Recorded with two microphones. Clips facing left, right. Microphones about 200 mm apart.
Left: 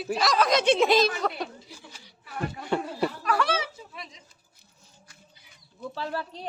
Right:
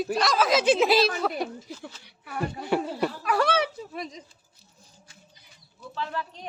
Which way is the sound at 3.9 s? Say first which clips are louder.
Right 8 dB; 40° right (ahead or behind).